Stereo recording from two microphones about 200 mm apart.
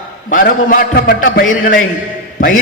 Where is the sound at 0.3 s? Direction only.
45° left (ahead or behind).